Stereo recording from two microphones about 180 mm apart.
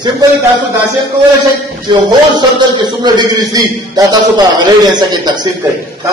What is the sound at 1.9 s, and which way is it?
A man's voice, 25° right (ahead or behind).